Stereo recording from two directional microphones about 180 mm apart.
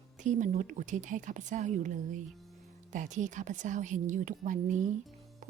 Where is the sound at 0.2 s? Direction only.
45° right (ahead or behind).